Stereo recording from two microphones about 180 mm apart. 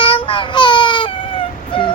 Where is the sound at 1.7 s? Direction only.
30° left (ahead or behind).